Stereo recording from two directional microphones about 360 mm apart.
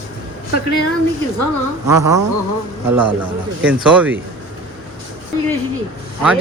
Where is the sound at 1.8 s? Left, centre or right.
Centre.